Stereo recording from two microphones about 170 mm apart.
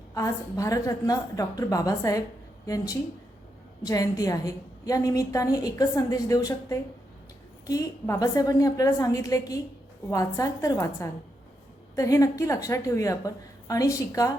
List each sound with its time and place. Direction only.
0.1 s a woman's voice: 20° left (ahead or behind)